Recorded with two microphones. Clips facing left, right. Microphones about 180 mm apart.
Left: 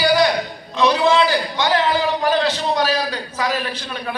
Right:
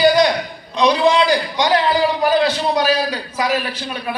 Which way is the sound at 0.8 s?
15° right (ahead or behind).